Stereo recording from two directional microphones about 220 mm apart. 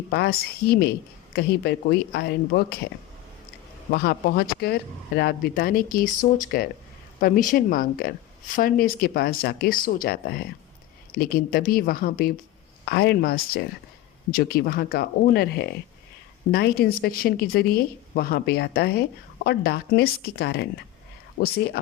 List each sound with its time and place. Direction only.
0.1 s speech: 45° left (ahead or behind)
3.9 s speech: 45° left (ahead or behind)